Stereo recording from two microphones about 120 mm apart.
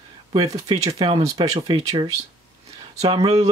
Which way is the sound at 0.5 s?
30° right (ahead or behind).